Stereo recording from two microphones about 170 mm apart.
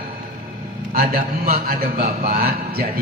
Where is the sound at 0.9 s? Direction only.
60° right (ahead or behind).